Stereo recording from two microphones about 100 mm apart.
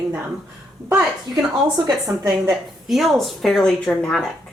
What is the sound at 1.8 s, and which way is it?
Speech, 30° right (ahead or behind).